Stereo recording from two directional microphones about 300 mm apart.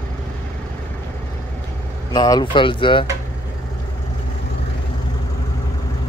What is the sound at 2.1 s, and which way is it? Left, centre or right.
Speech, centre.